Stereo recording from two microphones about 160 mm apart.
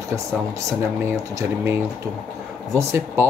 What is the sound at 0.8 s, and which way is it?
Speech, 15° right (ahead or behind).